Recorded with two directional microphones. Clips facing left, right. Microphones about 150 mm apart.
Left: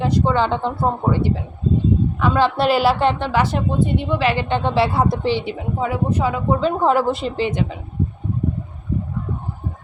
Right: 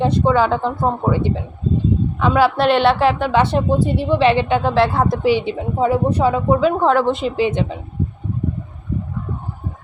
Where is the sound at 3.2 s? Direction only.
25° right (ahead or behind).